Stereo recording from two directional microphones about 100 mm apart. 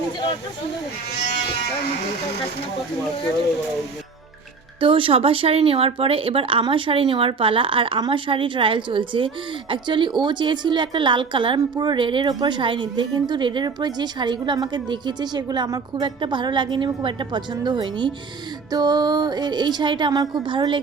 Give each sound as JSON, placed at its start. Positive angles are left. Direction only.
{"t": 4.8, "sound": "speech", "side_deg": -60}
{"t": 16.0, "sound": "speech", "side_deg": -55}